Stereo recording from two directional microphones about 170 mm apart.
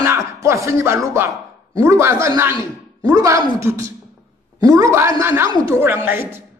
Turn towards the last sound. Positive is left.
turn(degrees=-15)  # may be behind; listen again after turning